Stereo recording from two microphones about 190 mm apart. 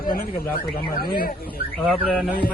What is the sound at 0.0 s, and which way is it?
Speech, 50° left (ahead or behind).